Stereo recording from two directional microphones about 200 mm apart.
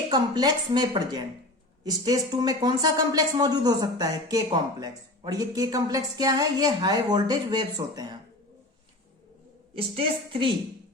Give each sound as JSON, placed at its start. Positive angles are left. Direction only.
{"t": 0.1, "sound": "speech", "side_deg": -20}
{"t": 9.7, "sound": "speech", "side_deg": -25}